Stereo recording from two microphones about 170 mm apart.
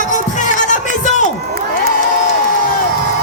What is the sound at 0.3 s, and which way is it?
Music, 45° left (ahead or behind).